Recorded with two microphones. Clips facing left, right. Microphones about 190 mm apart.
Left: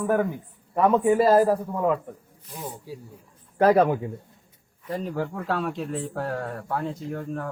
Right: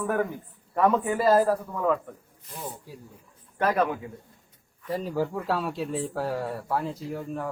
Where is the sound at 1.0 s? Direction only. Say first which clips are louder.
Left 4 dB; 20° left (ahead or behind).